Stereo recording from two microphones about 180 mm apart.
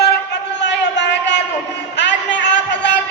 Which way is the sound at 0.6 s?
75° left (ahead or behind).